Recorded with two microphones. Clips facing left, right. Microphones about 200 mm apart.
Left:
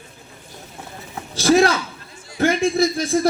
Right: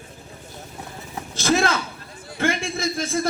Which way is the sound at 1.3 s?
35° left (ahead or behind).